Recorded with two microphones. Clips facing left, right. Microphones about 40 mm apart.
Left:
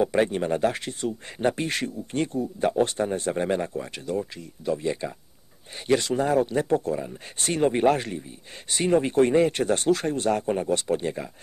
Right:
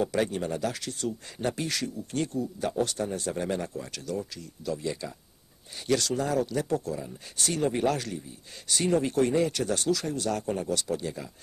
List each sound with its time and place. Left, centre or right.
0.0 s speech: left